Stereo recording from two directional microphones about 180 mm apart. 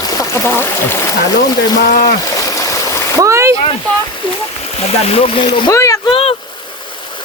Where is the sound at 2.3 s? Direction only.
20° left (ahead or behind).